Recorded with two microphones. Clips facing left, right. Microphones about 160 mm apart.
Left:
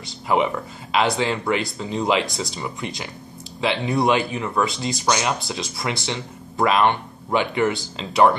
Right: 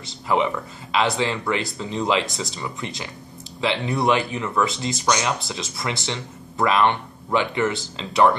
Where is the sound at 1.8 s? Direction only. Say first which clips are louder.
Left 1 dB; 5° left (ahead or behind).